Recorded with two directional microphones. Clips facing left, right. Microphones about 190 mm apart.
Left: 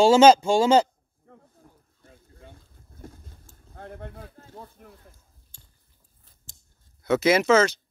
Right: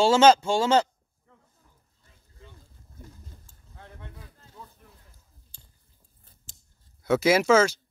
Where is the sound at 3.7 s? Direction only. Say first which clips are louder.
Left 8 dB; 55° left (ahead or behind).